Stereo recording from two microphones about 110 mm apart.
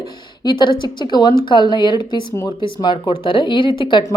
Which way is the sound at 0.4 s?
45° left (ahead or behind).